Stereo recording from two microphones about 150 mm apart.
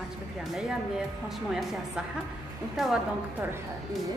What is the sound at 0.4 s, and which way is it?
Speech, 5° right (ahead or behind).